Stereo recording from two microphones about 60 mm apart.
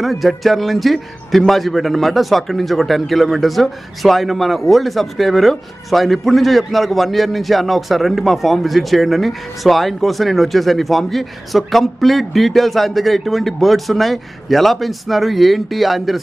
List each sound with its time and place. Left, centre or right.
0.0 s a man's voice: centre